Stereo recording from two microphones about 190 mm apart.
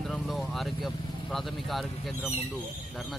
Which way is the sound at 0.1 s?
Centre (ahead or behind).